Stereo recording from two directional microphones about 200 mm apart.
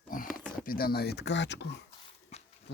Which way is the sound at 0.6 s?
45° left (ahead or behind).